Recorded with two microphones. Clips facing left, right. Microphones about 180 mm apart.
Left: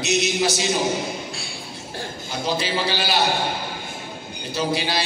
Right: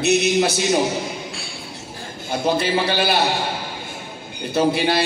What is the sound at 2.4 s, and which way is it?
Speech, 55° right (ahead or behind).